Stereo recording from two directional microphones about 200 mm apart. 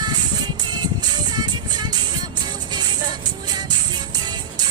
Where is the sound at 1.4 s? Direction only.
20° right (ahead or behind).